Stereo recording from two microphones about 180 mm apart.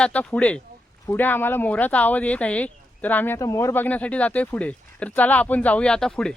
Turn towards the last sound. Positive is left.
turn(degrees=5)  # may be behind; listen again after turning